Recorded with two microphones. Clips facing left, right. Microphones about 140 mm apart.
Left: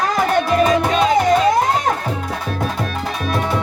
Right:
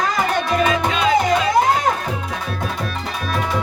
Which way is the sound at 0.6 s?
40° left (ahead or behind).